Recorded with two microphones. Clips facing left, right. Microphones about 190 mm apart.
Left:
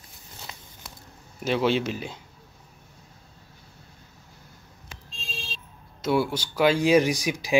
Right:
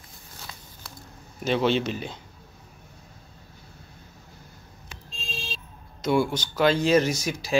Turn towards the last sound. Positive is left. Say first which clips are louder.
# left 2 dB
turn(degrees=15)  # may be behind; listen again after turning